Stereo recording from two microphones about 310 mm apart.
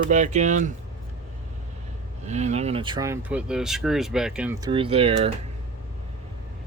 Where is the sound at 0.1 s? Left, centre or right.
Right.